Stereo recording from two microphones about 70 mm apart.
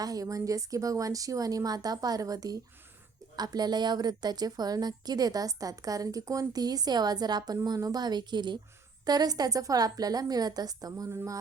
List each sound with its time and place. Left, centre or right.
0.0 s a woman's voice: right
3.3 s a woman's voice: right
9.0 s a woman's voice: right